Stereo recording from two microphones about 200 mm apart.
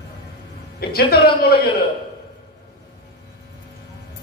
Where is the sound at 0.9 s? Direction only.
50° left (ahead or behind).